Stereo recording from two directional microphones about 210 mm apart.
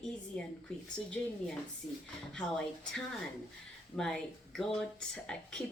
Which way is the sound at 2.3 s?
5° left (ahead or behind).